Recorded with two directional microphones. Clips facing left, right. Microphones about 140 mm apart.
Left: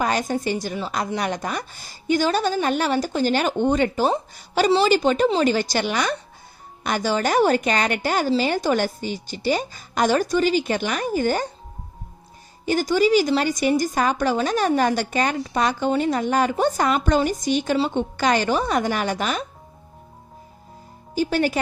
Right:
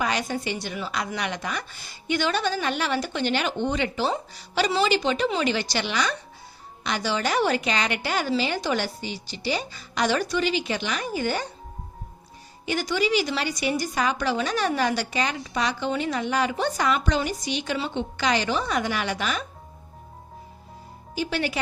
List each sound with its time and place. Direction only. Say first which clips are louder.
0.0 s a woman's voice: left 4 dB; 45° left (ahead or behind)
12.6 s a woman's voice: left 6 dB; 45° left (ahead or behind)
21.2 s a woman's voice: left 6 dB; 45° left (ahead or behind)